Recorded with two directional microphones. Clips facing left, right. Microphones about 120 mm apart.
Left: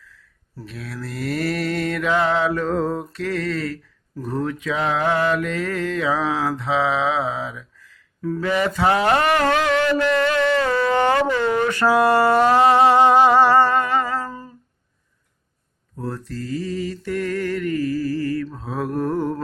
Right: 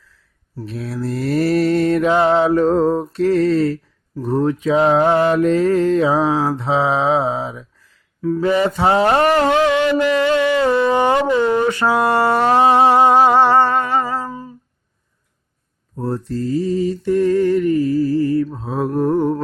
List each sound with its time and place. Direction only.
0.6 s mantra: 35° right (ahead or behind); by 13.1 s 20° right (ahead or behind)
13.4 s humming: 20° right (ahead or behind)
16.0 s mantra: 30° right (ahead or behind)